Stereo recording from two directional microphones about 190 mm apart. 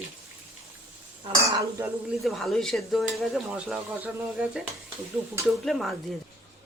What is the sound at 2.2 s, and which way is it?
Speech, centre (ahead or behind).